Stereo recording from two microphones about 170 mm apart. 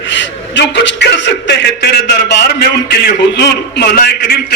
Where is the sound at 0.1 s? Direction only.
90° left.